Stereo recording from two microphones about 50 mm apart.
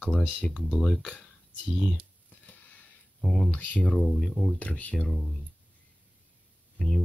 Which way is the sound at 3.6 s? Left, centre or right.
Left.